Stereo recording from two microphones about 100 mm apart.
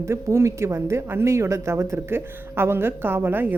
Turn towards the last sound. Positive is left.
turn(degrees=-20)  # may be behind; listen again after turning